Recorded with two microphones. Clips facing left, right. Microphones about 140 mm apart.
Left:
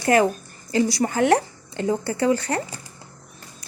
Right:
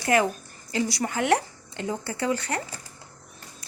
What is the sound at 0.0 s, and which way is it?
A woman's voice, 35° left (ahead or behind).